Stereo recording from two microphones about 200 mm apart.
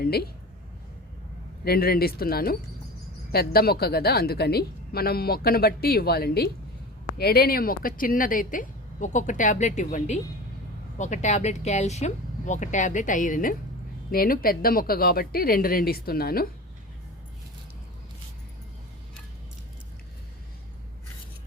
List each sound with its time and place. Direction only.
0.0 s speech: 50° left (ahead or behind)
1.6 s a woman's voice: 50° left (ahead or behind)